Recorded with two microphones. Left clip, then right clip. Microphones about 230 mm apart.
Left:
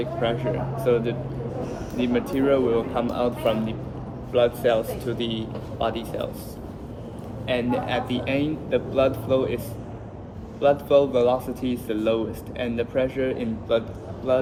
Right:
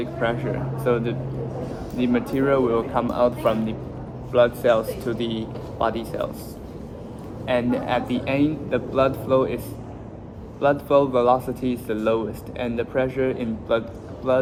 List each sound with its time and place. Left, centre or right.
0.0 s speech: centre
7.4 s speech: right
10.6 s speech: centre